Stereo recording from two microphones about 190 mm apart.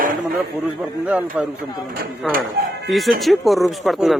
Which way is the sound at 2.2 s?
Centre (ahead or behind).